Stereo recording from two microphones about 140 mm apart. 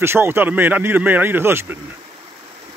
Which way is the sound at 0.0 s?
15° right (ahead or behind).